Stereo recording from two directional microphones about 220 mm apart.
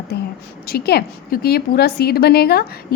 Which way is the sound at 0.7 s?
45° left (ahead or behind).